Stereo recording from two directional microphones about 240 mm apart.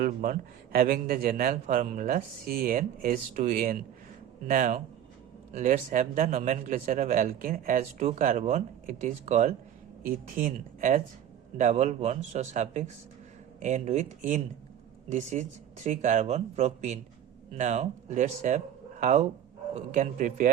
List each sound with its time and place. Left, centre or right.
0.0 s a man's voice: right